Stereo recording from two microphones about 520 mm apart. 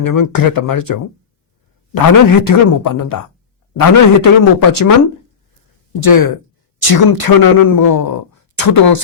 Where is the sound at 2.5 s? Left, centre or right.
Left.